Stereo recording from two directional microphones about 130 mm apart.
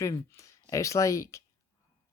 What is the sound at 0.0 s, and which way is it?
Speech, 25° left (ahead or behind).